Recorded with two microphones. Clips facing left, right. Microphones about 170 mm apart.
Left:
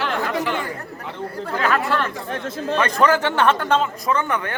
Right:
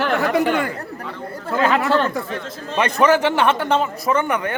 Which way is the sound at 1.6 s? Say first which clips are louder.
Right 4 dB; 25° right (ahead or behind).